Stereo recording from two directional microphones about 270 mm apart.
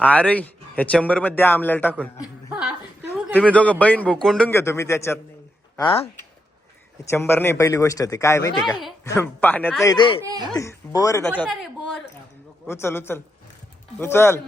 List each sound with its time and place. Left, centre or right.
0.0 s speech: centre
2.5 s a sound: centre
3.3 s speech: centre
7.1 s a man's voice: centre